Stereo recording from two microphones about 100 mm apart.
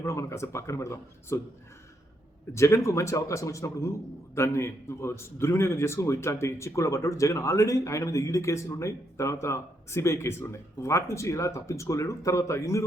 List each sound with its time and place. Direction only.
0.0 s a man's voice: 30° left (ahead or behind)
2.5 s a man's voice: 30° left (ahead or behind)